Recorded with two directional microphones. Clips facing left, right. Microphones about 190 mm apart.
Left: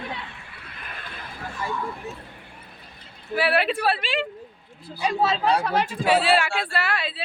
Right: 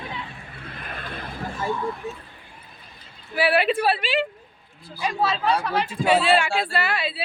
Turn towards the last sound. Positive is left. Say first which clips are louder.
# right 2 dB
turn(degrees=-5)  # may be behind; listen again after turning